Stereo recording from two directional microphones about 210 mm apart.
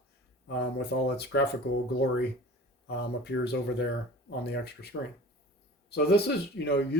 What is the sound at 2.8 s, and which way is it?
Speech, 50° left (ahead or behind).